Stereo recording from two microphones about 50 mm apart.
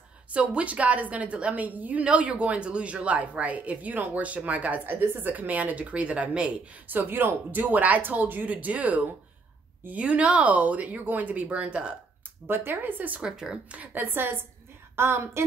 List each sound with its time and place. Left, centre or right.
0.3 s speech: right
6.9 s speech: right
12.4 s speech: right
13.2 s speech: centre
13.7 s a woman's voice: right
15.0 s a woman's voice: right